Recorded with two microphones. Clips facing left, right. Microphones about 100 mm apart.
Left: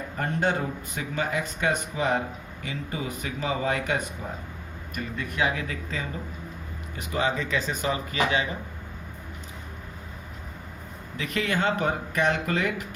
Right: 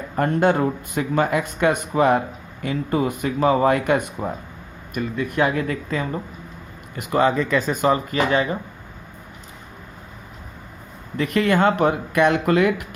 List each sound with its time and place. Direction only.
0.2 s speech: 60° right (ahead or behind)
5.4 s speech: 50° right (ahead or behind)
11.2 s speech: 55° right (ahead or behind)